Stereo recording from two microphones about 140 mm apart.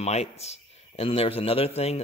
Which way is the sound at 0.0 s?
50° left (ahead or behind).